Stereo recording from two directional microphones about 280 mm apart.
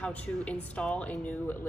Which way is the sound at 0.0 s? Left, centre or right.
Centre.